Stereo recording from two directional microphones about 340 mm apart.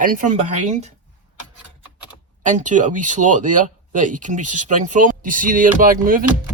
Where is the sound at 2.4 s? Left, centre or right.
Right.